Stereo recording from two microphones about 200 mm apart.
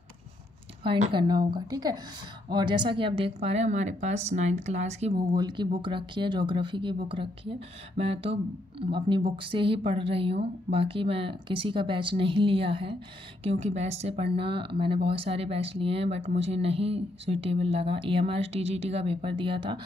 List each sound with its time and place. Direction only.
0.8 s a woman's voice: 25° right (ahead or behind)
5.2 s speech: 20° right (ahead or behind)